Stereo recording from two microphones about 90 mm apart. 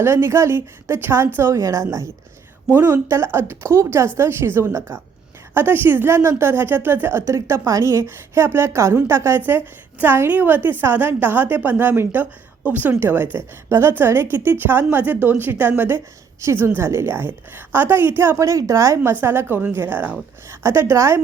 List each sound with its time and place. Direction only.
0.0 s a woman's voice: 30° right (ahead or behind)
20.5 s a woman's voice: 30° right (ahead or behind)